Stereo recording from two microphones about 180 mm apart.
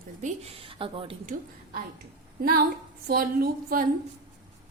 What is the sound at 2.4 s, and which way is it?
A woman's voice, 55° right (ahead or behind).